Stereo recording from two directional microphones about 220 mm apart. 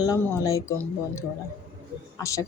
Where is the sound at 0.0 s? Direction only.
15° left (ahead or behind).